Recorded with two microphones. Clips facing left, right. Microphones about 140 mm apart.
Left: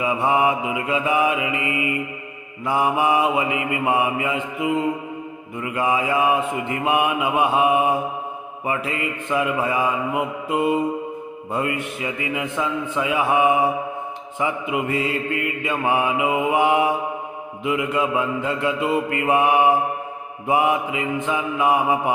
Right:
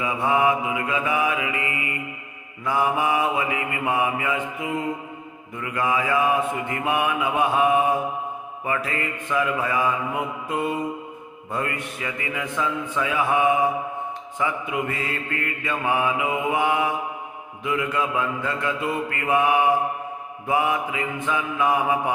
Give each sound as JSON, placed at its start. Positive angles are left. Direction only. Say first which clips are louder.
{"t": 0.0, "sound": "mantra", "louder": "left 2 dB", "side_deg": 20}